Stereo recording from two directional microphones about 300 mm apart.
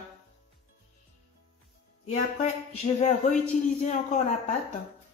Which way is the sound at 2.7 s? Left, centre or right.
Left.